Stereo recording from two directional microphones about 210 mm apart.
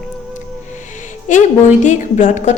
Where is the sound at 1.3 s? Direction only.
35° left (ahead or behind).